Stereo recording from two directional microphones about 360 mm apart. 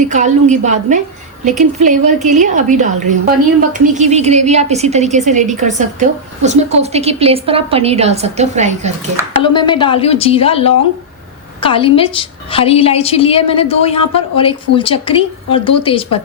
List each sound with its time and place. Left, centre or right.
0.0 s a woman's voice: centre
9.4 s a woman's voice: centre